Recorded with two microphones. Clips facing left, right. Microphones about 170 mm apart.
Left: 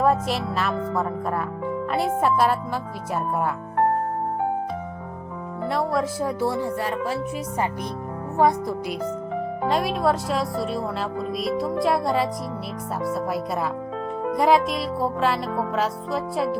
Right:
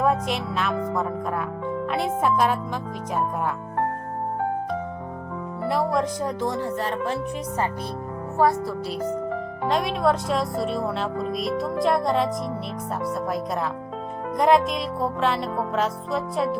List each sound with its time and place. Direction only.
0.0 s speech: centre (ahead or behind)
5.6 s speech: centre (ahead or behind)
8.4 s speech: 15° left (ahead or behind)
9.6 s speech: centre (ahead or behind)